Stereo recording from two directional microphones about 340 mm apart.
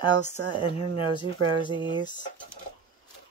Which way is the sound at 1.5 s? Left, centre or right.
Centre.